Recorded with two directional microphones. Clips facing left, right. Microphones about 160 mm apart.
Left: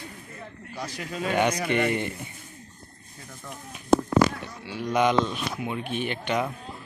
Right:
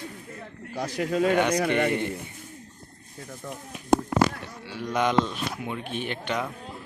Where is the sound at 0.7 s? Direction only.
55° right (ahead or behind).